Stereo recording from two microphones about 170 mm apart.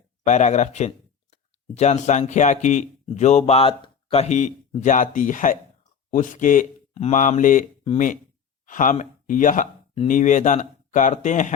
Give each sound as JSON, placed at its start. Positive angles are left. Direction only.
{"t": 0.3, "sound": "speech", "side_deg": 45}